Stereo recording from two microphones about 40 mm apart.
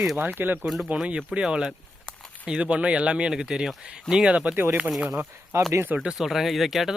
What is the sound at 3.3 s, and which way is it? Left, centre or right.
Speech, centre.